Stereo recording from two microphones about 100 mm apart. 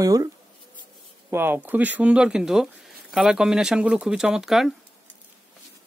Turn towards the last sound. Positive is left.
turn(degrees=-5)  # may be behind; listen again after turning